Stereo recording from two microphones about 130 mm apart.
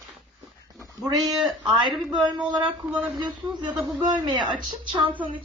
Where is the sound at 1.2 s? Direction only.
5° right (ahead or behind).